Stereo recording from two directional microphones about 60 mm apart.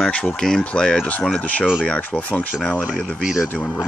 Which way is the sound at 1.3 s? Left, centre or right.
Left.